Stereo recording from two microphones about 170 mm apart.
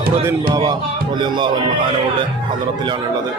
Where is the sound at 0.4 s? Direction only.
20° right (ahead or behind).